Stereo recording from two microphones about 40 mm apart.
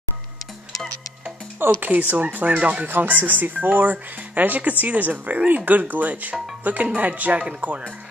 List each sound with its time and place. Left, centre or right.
1.8 s speech: right
2.6 s speech: right
2.9 s speech: right